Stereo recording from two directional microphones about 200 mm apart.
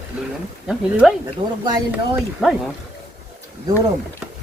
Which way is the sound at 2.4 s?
Centre (ahead or behind).